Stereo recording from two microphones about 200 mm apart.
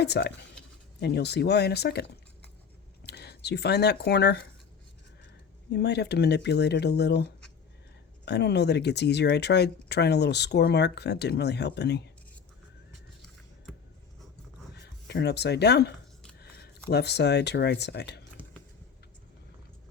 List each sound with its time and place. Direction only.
0.0 s speech: 55° left (ahead or behind)
3.1 s speech: 55° left (ahead or behind)
5.7 s speech: 55° left (ahead or behind)
13.7 s a sound: 5° left (ahead or behind)
14.8 s speech: 55° left (ahead or behind)
16.9 s speech: 55° left (ahead or behind)